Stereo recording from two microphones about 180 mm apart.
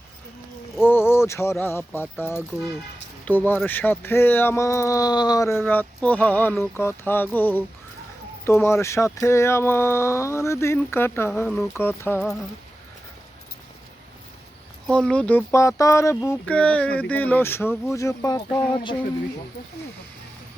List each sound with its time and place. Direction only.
0.9 s speech: 15° left (ahead or behind)
14.8 s speech: 5° left (ahead or behind); by 18.9 s 25° left (ahead or behind)